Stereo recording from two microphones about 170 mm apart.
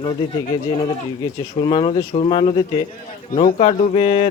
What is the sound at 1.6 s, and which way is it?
Speech, 30° left (ahead or behind).